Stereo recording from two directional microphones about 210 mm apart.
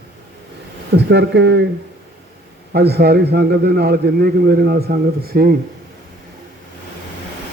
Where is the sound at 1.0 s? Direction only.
55° right (ahead or behind).